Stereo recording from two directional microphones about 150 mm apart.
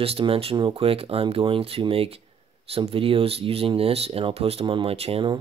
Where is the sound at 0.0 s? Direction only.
40° right (ahead or behind).